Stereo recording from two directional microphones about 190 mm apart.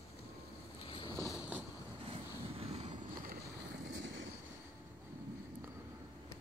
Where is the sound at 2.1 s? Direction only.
30° right (ahead or behind).